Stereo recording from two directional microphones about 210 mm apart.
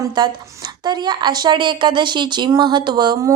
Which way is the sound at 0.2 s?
20° right (ahead or behind).